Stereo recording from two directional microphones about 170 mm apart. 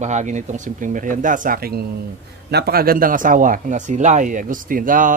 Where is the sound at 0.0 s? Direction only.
45° right (ahead or behind).